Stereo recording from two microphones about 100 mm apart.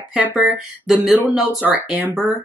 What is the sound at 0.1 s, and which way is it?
Speech, 15° right (ahead or behind).